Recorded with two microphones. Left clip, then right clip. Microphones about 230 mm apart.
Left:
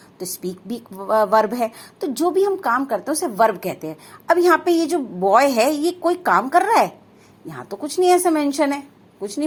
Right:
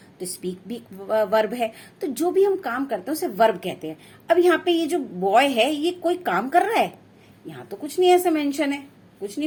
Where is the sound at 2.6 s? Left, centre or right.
Left.